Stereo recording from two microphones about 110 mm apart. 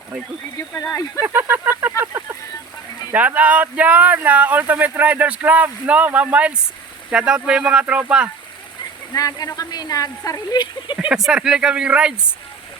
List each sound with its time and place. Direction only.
0.7 s speech: 15° left (ahead or behind)
1.2 s speech: 20° right (ahead or behind)
1.8 s a sound: 20° right (ahead or behind)
3.1 s speech: 15° right (ahead or behind)
9.1 s speech: 35° left (ahead or behind)
11.1 s speech: 5° right (ahead or behind)